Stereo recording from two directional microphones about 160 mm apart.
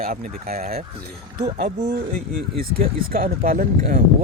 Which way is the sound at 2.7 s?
65° right (ahead or behind).